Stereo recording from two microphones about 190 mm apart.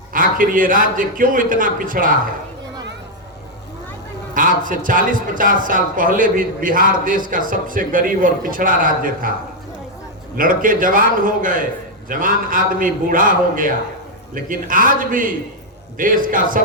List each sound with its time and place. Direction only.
0.1 s a man's voice: 45° right (ahead or behind)
4.4 s a man's voice: 45° right (ahead or behind)
10.3 s a man's voice: 45° right (ahead or behind)